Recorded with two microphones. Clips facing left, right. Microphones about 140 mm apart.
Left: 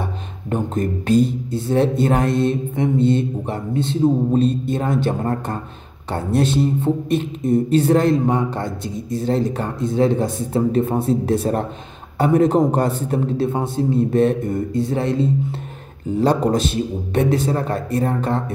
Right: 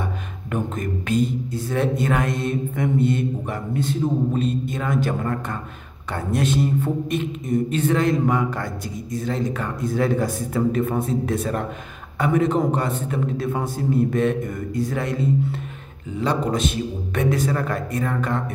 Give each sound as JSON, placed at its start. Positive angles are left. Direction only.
{"t": 0.5, "sound": "speech", "side_deg": 35}
{"t": 16.2, "sound": "speech", "side_deg": 40}